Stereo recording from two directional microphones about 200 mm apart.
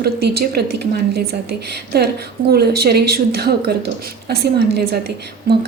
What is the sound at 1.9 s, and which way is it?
A woman's voice, 55° right (ahead or behind).